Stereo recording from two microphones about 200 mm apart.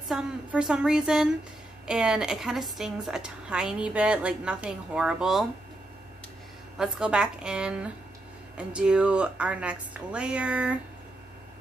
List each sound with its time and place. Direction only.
0.1 s a woman's voice: 5° right (ahead or behind)
6.8 s a woman's voice: 5° right (ahead or behind)